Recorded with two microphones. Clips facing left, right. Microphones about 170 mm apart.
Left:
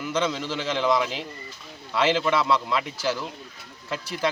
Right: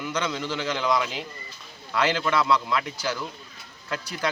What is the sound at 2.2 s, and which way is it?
Speech, 25° left (ahead or behind).